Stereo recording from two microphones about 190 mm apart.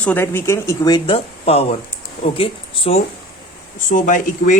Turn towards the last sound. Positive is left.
turn(degrees=40)  # may be behind; listen again after turning